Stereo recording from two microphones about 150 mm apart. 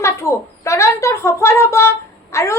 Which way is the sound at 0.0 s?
20° left (ahead or behind).